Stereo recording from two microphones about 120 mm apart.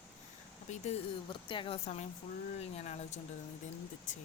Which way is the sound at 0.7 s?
90° left.